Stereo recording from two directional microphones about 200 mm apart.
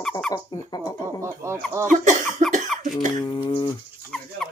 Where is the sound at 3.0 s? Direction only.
20° left (ahead or behind).